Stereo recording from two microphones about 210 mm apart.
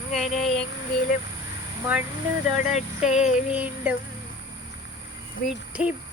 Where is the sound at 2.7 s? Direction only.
35° left (ahead or behind).